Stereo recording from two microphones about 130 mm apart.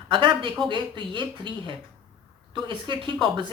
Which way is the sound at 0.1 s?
40° right (ahead or behind).